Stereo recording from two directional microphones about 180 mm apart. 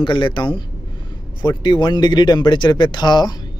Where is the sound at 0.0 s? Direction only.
25° left (ahead or behind).